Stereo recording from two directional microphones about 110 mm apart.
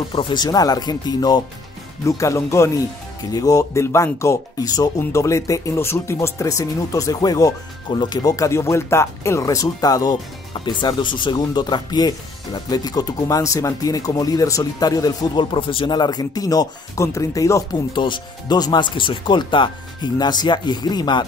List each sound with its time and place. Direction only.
0.1 s speech: 45° left (ahead or behind)
10.6 s speech: 45° left (ahead or behind)
17.9 s speech: 45° left (ahead or behind)